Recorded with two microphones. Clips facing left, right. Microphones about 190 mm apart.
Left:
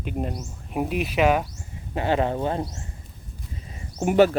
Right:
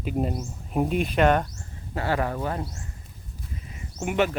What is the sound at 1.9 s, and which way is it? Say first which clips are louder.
Speech: left 3 dB; 20° left (ahead or behind).